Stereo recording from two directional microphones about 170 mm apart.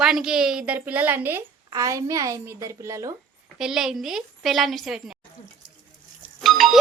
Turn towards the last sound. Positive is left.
turn(degrees=0)  # may be behind; listen again after turning